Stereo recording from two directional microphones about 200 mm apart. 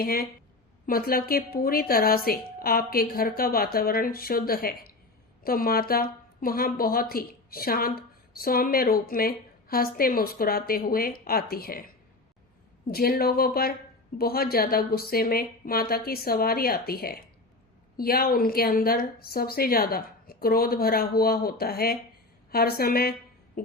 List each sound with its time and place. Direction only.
0.0 s speech: 50° left (ahead or behind)
12.9 s speech: 50° left (ahead or behind)
23.6 s music: 50° left (ahead or behind)